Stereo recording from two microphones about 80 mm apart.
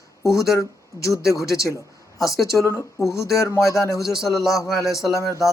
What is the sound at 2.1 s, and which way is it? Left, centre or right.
Speech, left.